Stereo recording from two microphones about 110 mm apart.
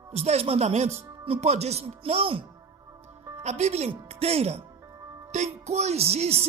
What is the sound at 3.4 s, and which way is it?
Speech, 85° right.